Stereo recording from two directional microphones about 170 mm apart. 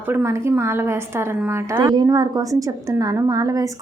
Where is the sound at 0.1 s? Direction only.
15° right (ahead or behind).